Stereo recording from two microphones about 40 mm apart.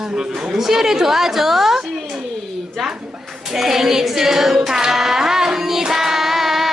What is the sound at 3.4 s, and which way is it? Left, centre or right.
Child singing, centre.